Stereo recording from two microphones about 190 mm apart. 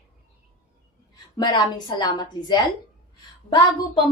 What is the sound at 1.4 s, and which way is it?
A woman's voice, 20° left (ahead or behind).